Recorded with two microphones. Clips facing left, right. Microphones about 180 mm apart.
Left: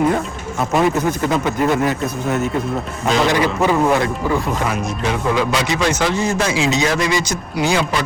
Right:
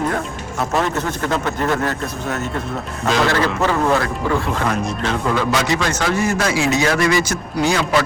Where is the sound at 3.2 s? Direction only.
15° left (ahead or behind).